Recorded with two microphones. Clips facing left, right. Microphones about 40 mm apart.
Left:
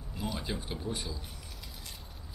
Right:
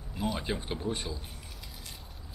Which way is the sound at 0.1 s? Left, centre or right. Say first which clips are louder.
Right 4 dB; centre.